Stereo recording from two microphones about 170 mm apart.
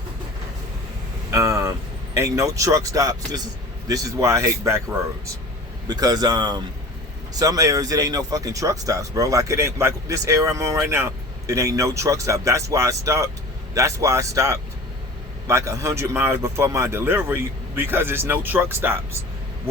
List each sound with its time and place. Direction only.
1.3 s vehicle: 15° right (ahead or behind)
2.1 s speech: 20° right (ahead or behind)